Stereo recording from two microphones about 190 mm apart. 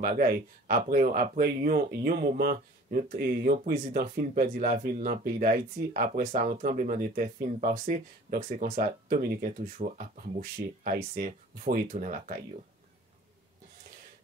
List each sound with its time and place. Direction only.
0.0 s speech: 45° right (ahead or behind)